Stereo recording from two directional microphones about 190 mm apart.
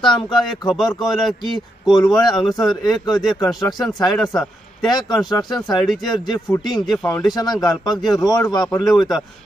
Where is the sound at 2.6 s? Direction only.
Centre (ahead or behind).